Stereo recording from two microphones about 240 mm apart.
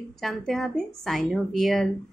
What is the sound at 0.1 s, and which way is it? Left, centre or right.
A woman's voice, centre.